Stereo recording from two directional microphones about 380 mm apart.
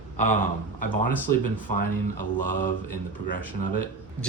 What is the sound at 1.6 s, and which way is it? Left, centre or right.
Mantra, left.